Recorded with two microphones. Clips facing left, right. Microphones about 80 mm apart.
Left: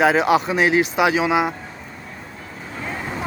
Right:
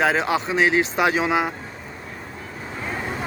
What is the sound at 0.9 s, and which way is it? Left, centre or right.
Speech, centre.